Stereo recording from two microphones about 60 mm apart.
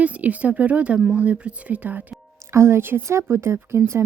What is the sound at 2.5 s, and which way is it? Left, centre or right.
A woman's voice, right.